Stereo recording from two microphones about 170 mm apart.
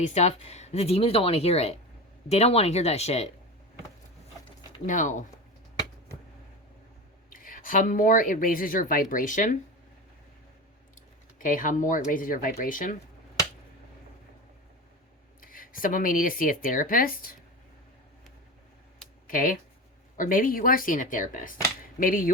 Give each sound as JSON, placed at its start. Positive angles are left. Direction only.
{"t": 0.0, "sound": "speech", "side_deg": 40}
{"t": 4.9, "sound": "speech", "side_deg": 50}
{"t": 7.3, "sound": "speech", "side_deg": 55}
{"t": 10.9, "sound": "speech", "side_deg": 50}
{"t": 15.4, "sound": "speech", "side_deg": 55}
{"t": 19.3, "sound": "speech", "side_deg": 55}